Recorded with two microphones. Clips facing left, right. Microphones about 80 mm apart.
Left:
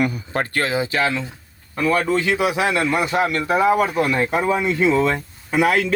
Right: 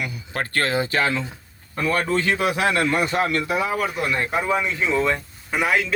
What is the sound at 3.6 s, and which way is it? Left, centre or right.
Speech, left.